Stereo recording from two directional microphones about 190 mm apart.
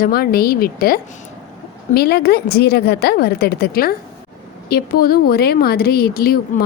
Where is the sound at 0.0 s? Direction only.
50° left (ahead or behind).